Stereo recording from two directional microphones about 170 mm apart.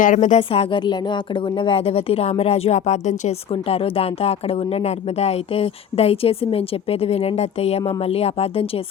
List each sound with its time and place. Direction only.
0.0 s speech: 50° left (ahead or behind)